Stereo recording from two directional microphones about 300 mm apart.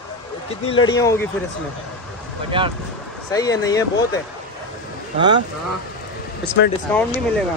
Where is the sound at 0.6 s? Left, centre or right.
Centre.